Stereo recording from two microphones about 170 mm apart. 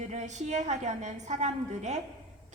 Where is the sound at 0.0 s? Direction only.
45° right (ahead or behind).